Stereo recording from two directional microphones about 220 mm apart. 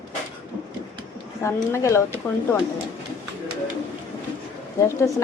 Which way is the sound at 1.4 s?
15° left (ahead or behind).